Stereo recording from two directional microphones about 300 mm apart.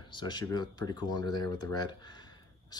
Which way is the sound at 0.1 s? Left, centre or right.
Centre.